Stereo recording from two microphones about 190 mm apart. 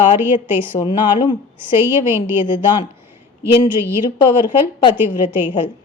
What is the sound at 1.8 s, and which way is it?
Speech, 10° right (ahead or behind).